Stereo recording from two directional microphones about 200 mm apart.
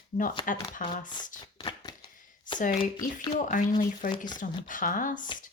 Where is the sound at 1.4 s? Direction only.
20° left (ahead or behind).